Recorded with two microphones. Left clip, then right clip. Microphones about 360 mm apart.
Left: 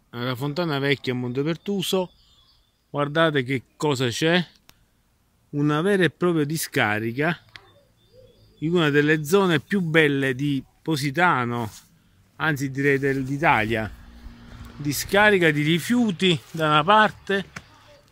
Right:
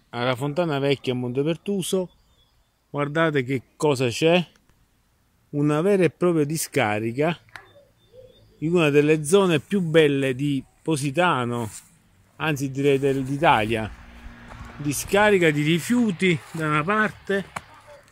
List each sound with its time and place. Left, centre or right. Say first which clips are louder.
0.1 s a man's voice: right 4 dB; centre
5.5 s a man's voice: right 1 dB; centre
8.5 s a man's voice: right 1 dB; centre